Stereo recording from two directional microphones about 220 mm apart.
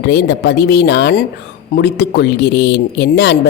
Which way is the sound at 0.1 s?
50° left (ahead or behind).